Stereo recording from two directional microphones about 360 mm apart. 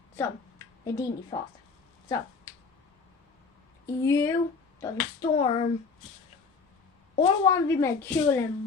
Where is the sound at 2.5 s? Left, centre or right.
Centre.